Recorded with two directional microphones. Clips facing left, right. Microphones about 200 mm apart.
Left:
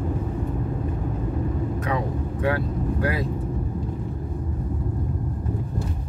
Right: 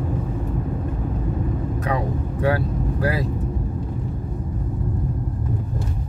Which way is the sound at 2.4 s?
35° right (ahead or behind).